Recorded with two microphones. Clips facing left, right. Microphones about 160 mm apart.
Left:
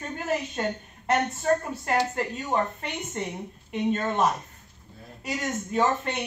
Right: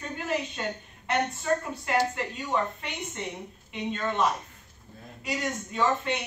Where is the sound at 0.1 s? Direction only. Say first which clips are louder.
Left 2 dB; 45° left (ahead or behind).